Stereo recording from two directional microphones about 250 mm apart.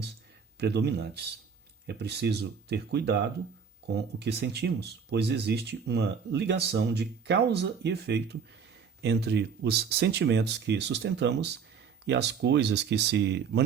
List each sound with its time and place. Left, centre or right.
0.6 s speech: right